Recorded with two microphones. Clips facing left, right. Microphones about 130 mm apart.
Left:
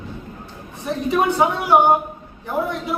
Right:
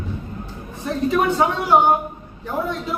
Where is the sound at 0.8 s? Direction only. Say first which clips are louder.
Even; 15° left (ahead or behind).